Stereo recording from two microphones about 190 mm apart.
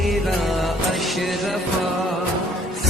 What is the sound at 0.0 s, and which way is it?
Music, centre (ahead or behind).